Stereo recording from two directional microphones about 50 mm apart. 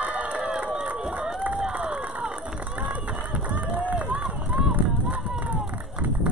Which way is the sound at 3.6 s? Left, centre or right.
Right.